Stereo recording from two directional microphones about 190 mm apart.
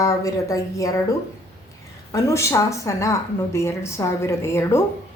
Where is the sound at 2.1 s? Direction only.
15° left (ahead or behind).